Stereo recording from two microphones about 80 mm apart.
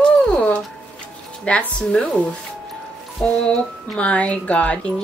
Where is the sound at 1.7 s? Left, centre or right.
Centre.